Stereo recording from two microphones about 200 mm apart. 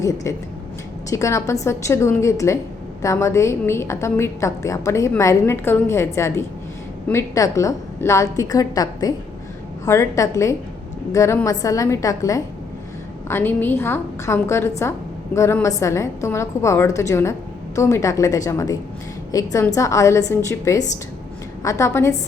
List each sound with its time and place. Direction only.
0.3 s a woman's voice: 15° left (ahead or behind)